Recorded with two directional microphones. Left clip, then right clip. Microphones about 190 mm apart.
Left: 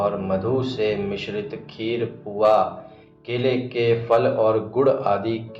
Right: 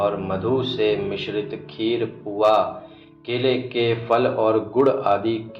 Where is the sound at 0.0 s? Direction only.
25° right (ahead or behind).